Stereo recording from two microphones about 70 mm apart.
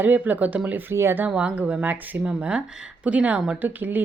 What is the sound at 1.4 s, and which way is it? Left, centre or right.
Speech, centre.